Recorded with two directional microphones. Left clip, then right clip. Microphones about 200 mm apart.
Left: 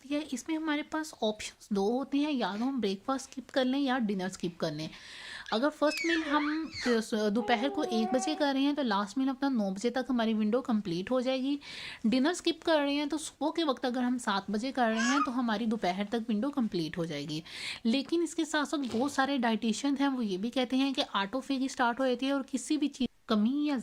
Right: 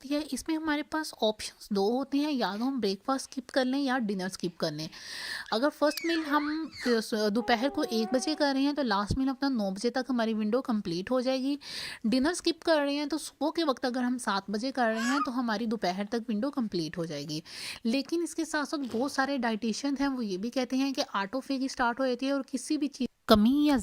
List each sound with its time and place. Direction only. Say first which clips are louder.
0.1 s speech: right 2 dB; 40° right (ahead or behind); by 18.8 s 25° right (ahead or behind)
18.8 s speech: even; 45° right (ahead or behind)
19.0 s speech: even; 30° right (ahead or behind)
23.3 s speech: right 8 dB; 60° right (ahead or behind)